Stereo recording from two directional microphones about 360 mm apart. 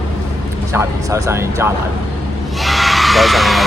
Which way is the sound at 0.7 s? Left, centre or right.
Centre.